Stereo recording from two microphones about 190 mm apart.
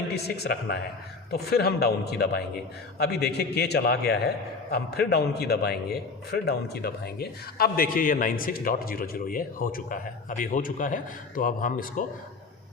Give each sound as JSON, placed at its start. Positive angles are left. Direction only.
{"t": 0.1, "sound": "a man's voice", "side_deg": 60}